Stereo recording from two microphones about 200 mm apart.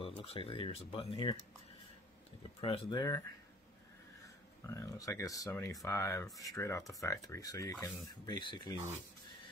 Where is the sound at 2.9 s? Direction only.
20° left (ahead or behind).